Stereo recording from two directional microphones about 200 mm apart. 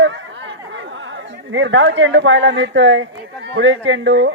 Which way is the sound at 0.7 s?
70° right (ahead or behind).